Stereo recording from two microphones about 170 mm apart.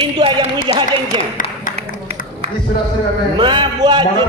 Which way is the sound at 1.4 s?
50° left (ahead or behind).